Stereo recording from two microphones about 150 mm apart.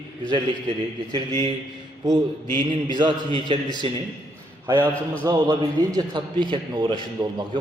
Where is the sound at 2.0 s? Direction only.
30° right (ahead or behind).